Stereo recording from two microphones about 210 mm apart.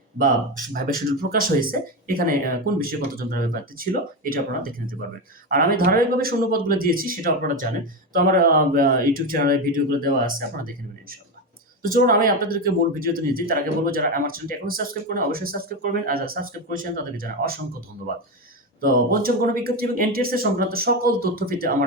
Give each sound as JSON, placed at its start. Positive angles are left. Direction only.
{"t": 0.2, "sound": "speech", "side_deg": -40}
{"t": 11.8, "sound": "speech", "side_deg": -40}
{"t": 18.8, "sound": "speech", "side_deg": -45}